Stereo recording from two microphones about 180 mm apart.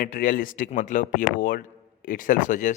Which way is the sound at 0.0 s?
50° left (ahead or behind).